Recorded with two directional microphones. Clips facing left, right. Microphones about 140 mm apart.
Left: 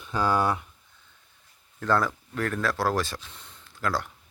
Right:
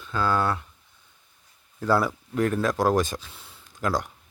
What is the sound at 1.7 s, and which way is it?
Speech, 10° right (ahead or behind).